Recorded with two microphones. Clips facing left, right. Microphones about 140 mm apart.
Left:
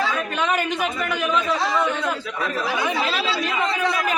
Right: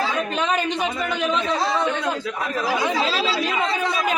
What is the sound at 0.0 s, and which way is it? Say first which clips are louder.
Speech: even; 25° right (ahead or behind).